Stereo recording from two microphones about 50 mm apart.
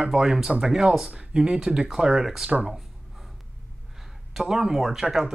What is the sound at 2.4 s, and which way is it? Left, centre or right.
Speech, right.